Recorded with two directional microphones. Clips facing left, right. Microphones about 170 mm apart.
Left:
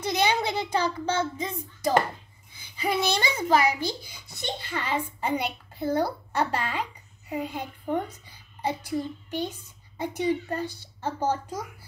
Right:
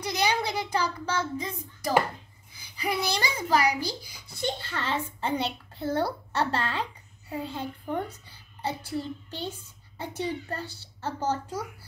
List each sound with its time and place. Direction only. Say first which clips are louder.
0.0 s a child's voice: left 2 dB; 25° left (ahead or behind)